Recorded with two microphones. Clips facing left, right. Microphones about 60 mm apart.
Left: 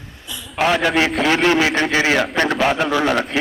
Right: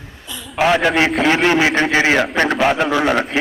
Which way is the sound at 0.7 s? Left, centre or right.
Centre.